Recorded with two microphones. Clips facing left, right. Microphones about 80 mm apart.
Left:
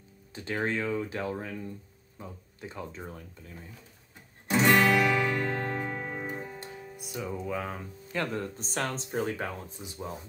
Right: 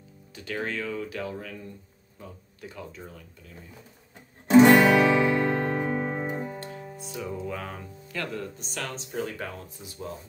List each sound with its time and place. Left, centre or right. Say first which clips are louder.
0.3 s speech: left 1 dB; left
4.7 s music: right 5 dB; centre
6.3 s music: right 5 dB; centre
7.2 s music: even; centre
8.1 s speech: left 2 dB; left
9.4 s speech: left 1 dB; left